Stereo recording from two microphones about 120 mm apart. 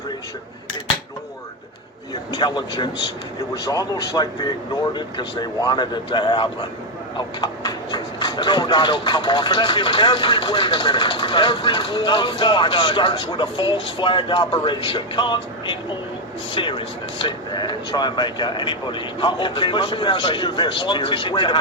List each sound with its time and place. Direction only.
2.3 s speech: 35° left (ahead or behind)